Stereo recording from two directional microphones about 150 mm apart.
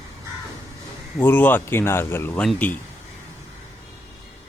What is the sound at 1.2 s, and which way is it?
Speech, 10° left (ahead or behind).